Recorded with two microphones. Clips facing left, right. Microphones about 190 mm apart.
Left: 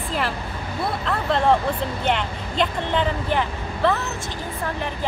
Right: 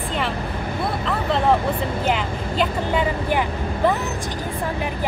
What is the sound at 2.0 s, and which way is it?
Speech, 5° right (ahead or behind).